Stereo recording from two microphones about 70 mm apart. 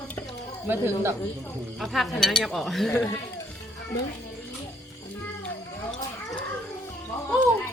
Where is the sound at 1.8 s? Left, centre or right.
Centre.